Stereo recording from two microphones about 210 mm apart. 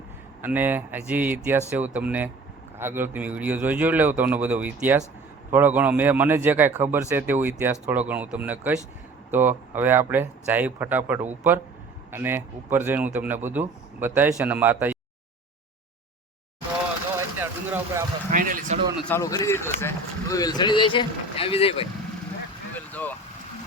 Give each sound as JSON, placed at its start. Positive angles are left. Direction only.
{"t": 0.4, "sound": "a man's voice", "side_deg": -10}
{"t": 17.2, "sound": "vehicle", "side_deg": -10}
{"t": 18.3, "sound": "a sound", "side_deg": -40}
{"t": 19.0, "sound": "speech", "side_deg": 15}
{"t": 22.9, "sound": "vehicle", "side_deg": 10}